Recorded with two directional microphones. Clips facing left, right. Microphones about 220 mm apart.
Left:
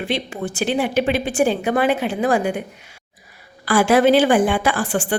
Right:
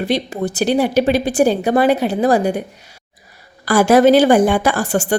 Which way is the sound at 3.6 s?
40° right (ahead or behind).